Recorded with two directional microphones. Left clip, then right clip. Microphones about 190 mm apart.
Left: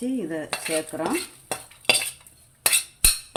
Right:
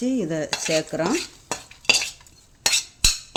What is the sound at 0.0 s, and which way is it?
Speech, 50° right (ahead or behind).